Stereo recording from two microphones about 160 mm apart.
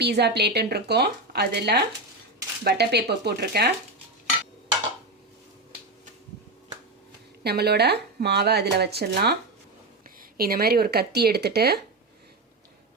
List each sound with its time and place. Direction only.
0.0 s speech: 90° right
7.4 s speech: 90° right
10.2 s speech: 70° right (ahead or behind); by 11.8 s 85° right